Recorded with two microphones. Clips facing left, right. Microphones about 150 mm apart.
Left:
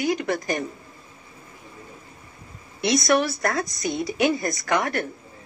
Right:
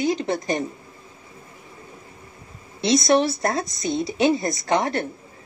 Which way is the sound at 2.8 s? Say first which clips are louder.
Right 2 dB; 25° right (ahead or behind).